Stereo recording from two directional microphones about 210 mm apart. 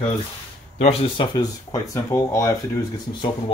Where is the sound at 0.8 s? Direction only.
30° left (ahead or behind).